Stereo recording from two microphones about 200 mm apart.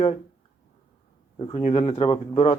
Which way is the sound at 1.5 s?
30° left (ahead or behind).